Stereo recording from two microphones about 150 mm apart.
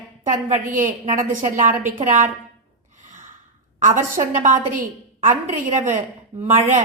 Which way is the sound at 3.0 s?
60° right (ahead or behind).